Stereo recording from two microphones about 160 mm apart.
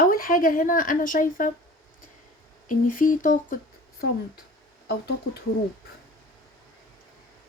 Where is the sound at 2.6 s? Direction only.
55° left (ahead or behind).